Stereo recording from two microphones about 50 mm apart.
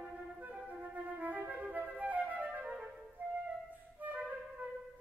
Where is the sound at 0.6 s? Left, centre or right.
Right.